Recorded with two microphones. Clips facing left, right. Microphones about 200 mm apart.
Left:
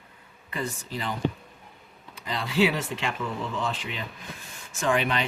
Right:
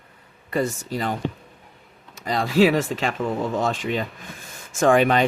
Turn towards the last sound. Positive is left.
turn(degrees=-45)  # may be behind; listen again after turning